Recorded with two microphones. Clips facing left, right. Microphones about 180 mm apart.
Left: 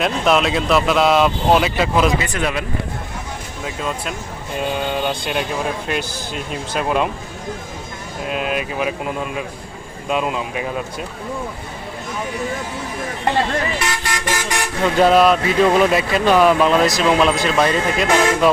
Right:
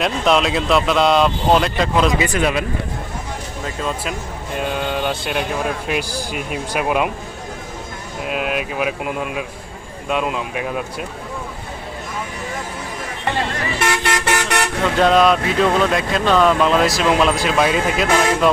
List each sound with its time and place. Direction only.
0.0 s speech: centre (ahead or behind)
2.2 s speech: 15° right (ahead or behind)
3.6 s speech: centre (ahead or behind)
8.3 s speech: 5° right (ahead or behind)
13.8 s vehicle horn: 60° right (ahead or behind)
14.9 s speech: 5° left (ahead or behind)